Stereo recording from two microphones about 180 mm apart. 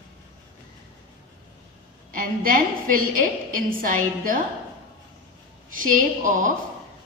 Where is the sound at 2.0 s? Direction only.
50° right (ahead or behind).